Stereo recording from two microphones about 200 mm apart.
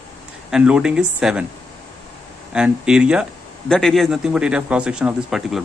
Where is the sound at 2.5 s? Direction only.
5° right (ahead or behind).